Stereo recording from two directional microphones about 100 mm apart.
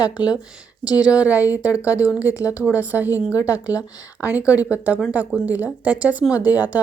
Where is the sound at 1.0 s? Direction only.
10° right (ahead or behind).